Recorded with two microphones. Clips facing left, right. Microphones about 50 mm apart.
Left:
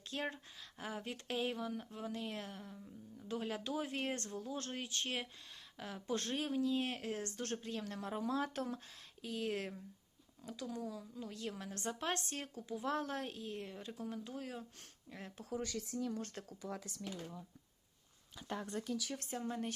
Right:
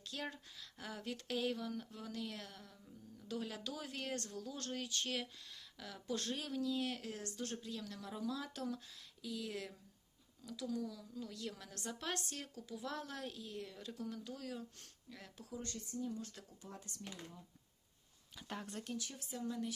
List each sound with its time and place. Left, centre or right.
0.0 s speech: left
15.5 s speech: left
16.3 s speech: left
19.0 s speech: left